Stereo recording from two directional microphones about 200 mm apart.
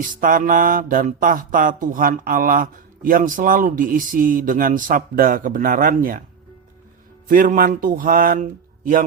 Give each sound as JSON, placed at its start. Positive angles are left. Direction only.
{"t": 0.0, "sound": "mantra", "side_deg": -45}
{"t": 7.3, "sound": "mantra", "side_deg": -45}